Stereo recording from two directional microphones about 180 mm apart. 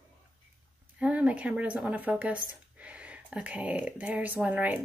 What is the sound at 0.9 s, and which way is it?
Speech, 5° right (ahead or behind).